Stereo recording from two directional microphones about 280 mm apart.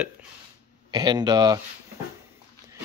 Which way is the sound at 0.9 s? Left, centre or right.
Centre.